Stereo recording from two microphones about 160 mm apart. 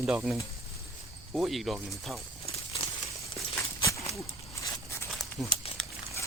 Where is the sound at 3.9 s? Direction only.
20° left (ahead or behind).